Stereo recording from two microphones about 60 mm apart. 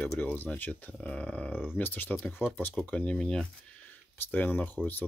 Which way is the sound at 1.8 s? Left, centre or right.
Left.